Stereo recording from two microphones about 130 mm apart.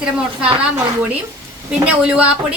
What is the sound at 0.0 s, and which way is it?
Speech, 10° right (ahead or behind).